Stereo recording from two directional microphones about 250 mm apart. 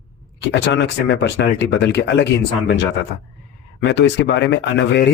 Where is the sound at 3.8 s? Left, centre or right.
Left.